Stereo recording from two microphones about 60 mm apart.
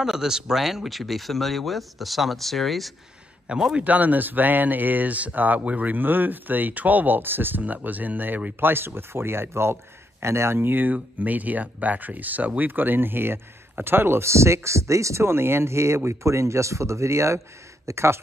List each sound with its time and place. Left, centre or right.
0.0 s speech: centre
3.4 s a man's voice: centre
3.8 s speech: right